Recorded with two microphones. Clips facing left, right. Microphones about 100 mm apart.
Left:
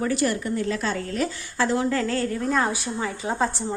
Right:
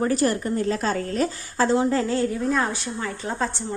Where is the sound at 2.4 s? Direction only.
Centre (ahead or behind).